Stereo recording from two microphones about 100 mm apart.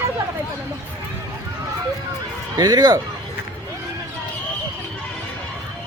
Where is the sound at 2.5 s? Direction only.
40° right (ahead or behind).